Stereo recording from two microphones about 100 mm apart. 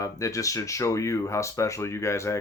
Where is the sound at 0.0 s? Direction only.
35° left (ahead or behind).